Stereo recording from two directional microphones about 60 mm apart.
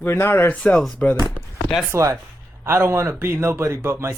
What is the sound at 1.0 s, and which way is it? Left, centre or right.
Speech, left.